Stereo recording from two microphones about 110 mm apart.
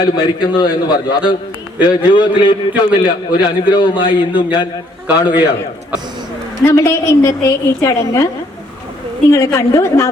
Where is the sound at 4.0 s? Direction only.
45° left (ahead or behind).